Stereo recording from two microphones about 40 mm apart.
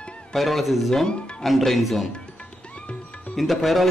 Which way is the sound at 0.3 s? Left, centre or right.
Centre.